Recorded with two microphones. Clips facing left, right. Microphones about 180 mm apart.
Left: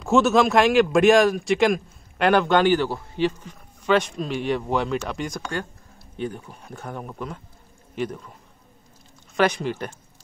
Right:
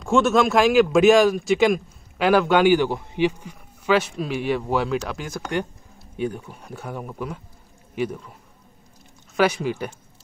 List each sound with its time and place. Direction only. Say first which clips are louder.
0.0 s speech: even; centre (ahead or behind)
5.5 s a sound: right 4 dB; 15° right (ahead or behind)
6.5 s speech: right 1 dB; 5° right (ahead or behind)
9.4 s speech: right 1 dB; 5° right (ahead or behind)